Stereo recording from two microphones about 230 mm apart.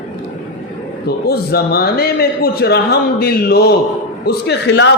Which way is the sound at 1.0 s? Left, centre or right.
Left.